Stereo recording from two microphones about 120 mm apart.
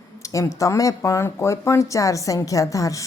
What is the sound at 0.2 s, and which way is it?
Speech, 25° left (ahead or behind).